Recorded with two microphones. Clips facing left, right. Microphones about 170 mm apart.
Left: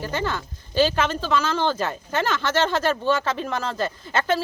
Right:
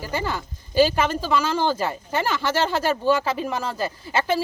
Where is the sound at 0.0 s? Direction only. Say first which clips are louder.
Left 1 dB; 10° right (ahead or behind).